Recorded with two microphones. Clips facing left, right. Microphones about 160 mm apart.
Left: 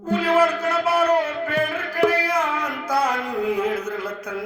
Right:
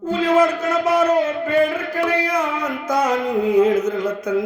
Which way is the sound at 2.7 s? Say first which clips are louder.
Right 3 dB; 10° left (ahead or behind).